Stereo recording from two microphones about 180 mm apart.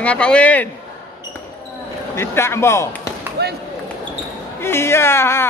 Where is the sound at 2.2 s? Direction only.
15° left (ahead or behind).